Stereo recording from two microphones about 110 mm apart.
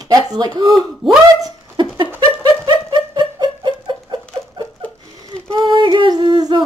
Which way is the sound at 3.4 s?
40° right (ahead or behind).